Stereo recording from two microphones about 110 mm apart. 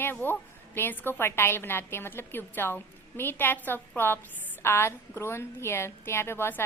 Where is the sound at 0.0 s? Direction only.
20° left (ahead or behind).